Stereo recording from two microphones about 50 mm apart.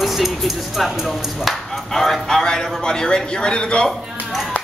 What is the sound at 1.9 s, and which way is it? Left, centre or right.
A man's voice, centre.